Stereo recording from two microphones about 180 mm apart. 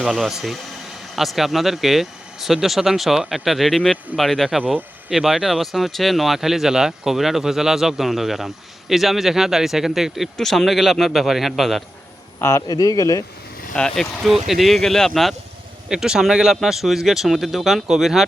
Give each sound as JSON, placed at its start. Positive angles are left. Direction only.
{"t": 0.0, "sound": "speech", "side_deg": 0}
{"t": 12.4, "sound": "speech", "side_deg": 15}
{"t": 13.7, "sound": "speech", "side_deg": 5}